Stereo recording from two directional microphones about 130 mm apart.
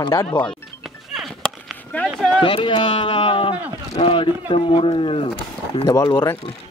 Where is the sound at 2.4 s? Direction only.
40° left (ahead or behind).